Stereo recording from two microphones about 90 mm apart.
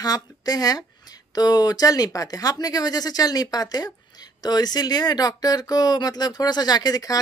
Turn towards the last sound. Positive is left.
turn(degrees=45)  # may be behind; listen again after turning